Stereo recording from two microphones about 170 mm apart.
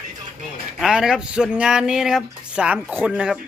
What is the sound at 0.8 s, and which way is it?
Speech, 5° right (ahead or behind).